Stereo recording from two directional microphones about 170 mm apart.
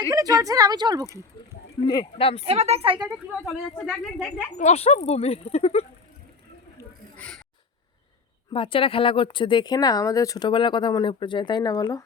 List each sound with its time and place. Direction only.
0.1 s a woman's voice: 20° right (ahead or behind)
1.8 s speech: 25° left (ahead or behind)
2.4 s a woman's voice: 35° right (ahead or behind)
3.4 s speech: centre (ahead or behind)
4.5 s speech: 40° left (ahead or behind)
7.2 s speech: 5° left (ahead or behind)
8.5 s speech: 30° left (ahead or behind)